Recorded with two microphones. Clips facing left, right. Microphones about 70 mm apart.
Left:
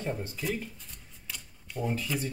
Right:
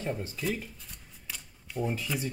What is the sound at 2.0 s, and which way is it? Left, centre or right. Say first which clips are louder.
Speech: even; centre.